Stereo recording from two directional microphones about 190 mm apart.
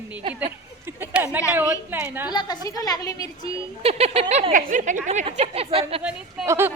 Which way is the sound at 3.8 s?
35° right (ahead or behind).